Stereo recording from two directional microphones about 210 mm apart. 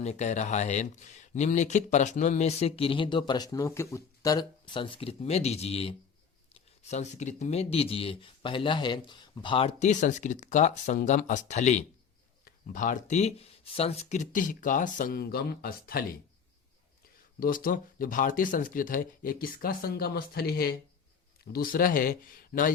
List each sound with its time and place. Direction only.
0.0 s speech: 35° left (ahead or behind)
17.4 s speech: 40° left (ahead or behind)